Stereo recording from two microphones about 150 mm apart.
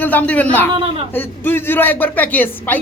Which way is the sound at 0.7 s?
35° right (ahead or behind).